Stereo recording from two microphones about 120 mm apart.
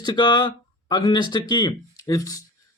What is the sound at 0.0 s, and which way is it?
Speech, 40° left (ahead or behind).